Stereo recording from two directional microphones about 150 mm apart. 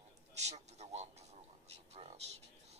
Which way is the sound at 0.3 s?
50° right (ahead or behind).